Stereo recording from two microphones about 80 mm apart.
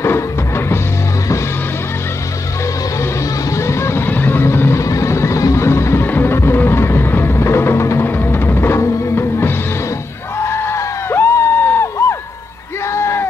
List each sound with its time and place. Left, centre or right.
0.0 s music: left
3.0 s vehicle: left
4.8 s music: left
10.4 s crowd: left
12.9 s a sound: left